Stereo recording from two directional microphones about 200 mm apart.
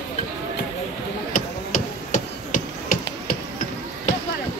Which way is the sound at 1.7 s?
40° left (ahead or behind).